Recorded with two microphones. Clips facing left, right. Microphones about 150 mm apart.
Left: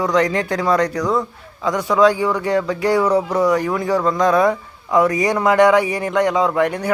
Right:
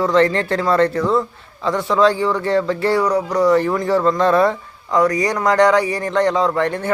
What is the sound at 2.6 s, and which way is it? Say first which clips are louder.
Speech: even; centre (ahead or behind).